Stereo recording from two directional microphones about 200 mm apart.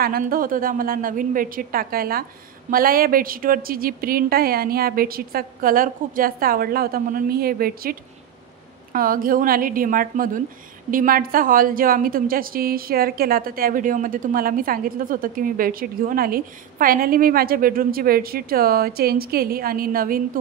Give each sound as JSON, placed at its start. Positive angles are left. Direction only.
{"t": 0.0, "sound": "a woman's voice", "side_deg": -45}